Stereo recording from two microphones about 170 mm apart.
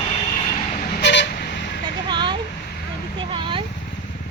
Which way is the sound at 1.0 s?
90° left.